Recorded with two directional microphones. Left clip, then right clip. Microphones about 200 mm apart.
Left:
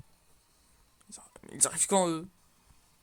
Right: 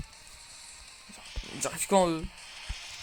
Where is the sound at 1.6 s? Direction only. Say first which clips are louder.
Right 2 dB; 10° left (ahead or behind).